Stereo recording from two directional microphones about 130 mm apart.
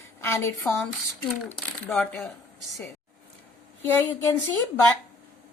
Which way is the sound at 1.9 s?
5° left (ahead or behind).